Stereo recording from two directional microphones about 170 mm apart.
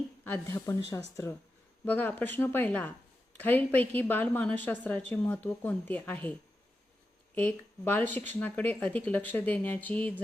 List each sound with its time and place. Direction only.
0.3 s a woman's voice: 20° left (ahead or behind)
7.3 s a woman's voice: 10° left (ahead or behind)